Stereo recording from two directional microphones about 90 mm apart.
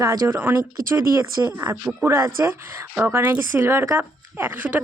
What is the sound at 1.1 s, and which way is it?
Speech, 35° right (ahead or behind).